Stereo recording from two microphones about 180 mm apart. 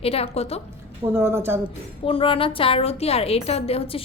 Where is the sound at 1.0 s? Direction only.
15° right (ahead or behind).